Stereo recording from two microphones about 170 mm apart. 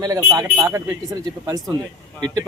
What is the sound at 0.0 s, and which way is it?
Speech, 20° right (ahead or behind).